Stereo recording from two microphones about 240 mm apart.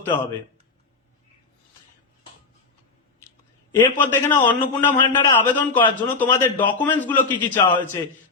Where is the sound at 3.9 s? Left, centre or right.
Centre.